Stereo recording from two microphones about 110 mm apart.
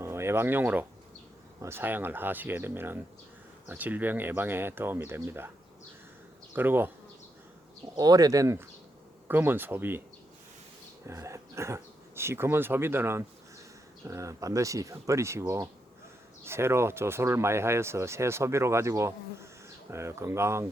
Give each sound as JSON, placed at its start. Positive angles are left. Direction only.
{"t": 0.0, "sound": "speech", "side_deg": -25}
{"t": 6.5, "sound": "bee", "side_deg": -20}
{"t": 7.9, "sound": "speech", "side_deg": -35}
{"t": 11.0, "sound": "speech", "side_deg": -25}